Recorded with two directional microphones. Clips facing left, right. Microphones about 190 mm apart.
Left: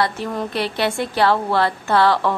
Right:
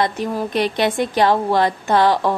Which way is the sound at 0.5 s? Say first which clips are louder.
Right 4 dB; 15° right (ahead or behind).